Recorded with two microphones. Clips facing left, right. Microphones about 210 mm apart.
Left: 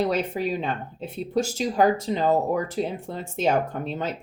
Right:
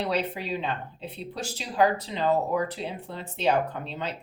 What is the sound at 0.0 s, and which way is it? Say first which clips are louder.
Speech: left 5 dB; 45° left (ahead or behind).